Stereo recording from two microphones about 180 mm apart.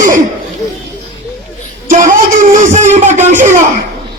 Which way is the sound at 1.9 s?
45° right (ahead or behind).